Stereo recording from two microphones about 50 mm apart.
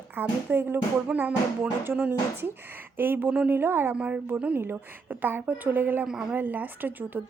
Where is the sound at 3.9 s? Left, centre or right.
Right.